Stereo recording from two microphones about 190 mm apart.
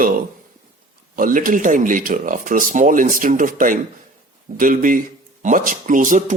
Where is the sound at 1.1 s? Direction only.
45° right (ahead or behind).